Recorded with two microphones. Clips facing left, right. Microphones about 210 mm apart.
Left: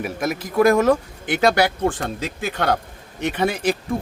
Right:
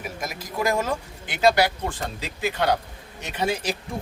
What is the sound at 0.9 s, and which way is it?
Speech, 55° left (ahead or behind).